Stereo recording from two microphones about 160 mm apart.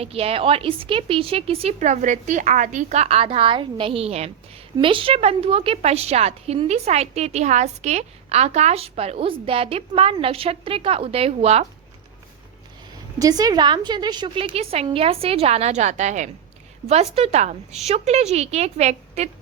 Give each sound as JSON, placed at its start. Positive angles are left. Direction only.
{"t": 0.0, "sound": "a woman's voice", "side_deg": -40}
{"t": 13.1, "sound": "a woman's voice", "side_deg": -20}